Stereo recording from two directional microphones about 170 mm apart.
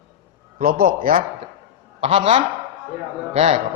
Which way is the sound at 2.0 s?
35° right (ahead or behind).